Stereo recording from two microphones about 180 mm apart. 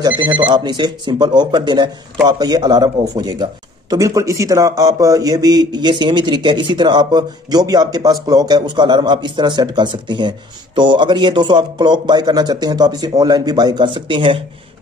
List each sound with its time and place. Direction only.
0.2 s a man's voice: 25° right (ahead or behind)